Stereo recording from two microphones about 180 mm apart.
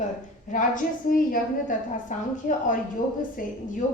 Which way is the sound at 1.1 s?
50° left (ahead or behind).